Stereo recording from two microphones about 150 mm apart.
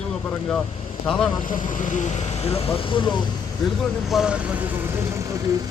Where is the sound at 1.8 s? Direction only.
55° left (ahead or behind).